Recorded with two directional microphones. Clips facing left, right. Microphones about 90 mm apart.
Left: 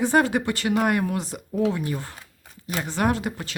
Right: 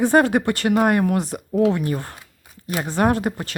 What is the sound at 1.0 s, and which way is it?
A woman's voice, 55° right (ahead or behind).